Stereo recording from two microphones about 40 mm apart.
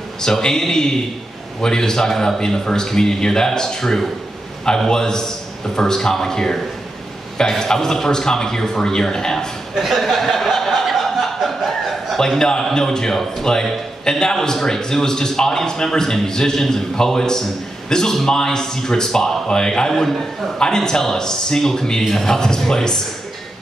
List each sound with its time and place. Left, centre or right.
0.2 s a man's voice: centre
9.8 s a sound: centre
12.4 s a man's voice: centre
19.9 s a man's voice: centre
20.5 s a man's voice: centre